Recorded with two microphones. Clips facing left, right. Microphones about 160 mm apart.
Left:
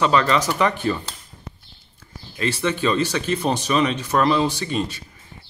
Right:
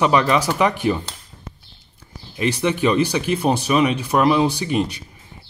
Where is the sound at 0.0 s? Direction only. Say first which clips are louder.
Right 2 dB; 15° right (ahead or behind).